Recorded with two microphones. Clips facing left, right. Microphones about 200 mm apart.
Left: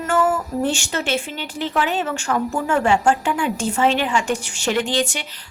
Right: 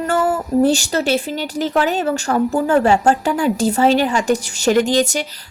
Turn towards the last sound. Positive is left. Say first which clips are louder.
# right 6 dB
turn(degrees=-40)  # may be behind; listen again after turning